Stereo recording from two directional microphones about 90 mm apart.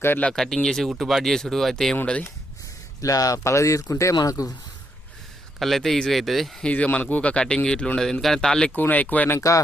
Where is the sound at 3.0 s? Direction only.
40° left (ahead or behind).